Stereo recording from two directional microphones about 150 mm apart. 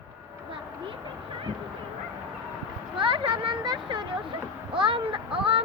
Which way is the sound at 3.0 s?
35° right (ahead or behind).